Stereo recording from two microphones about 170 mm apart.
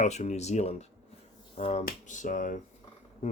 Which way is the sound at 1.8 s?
50° left (ahead or behind).